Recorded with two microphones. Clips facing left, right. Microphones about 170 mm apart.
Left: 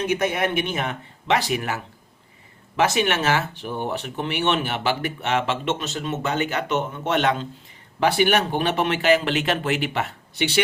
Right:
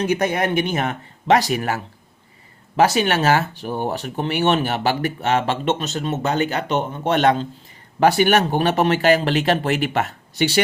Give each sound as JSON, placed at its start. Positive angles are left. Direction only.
{"t": 0.0, "sound": "speech", "side_deg": -40}